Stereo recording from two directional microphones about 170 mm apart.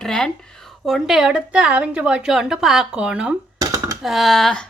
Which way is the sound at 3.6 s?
20° right (ahead or behind).